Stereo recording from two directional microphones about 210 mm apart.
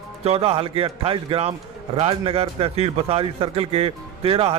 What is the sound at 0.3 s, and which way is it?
A man's voice, 25° right (ahead or behind).